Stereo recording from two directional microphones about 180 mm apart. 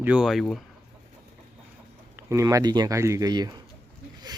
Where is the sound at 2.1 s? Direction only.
15° right (ahead or behind).